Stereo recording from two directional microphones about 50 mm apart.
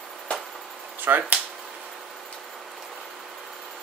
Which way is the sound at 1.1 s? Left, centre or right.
Right.